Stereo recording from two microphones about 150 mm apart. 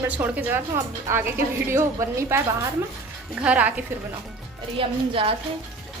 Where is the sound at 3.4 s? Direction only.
10° right (ahead or behind).